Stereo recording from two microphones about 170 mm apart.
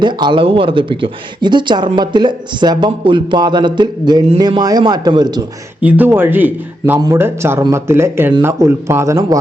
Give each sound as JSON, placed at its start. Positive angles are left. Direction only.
{"t": 0.0, "sound": "speech", "side_deg": -25}
{"t": 5.8, "sound": "speech", "side_deg": -10}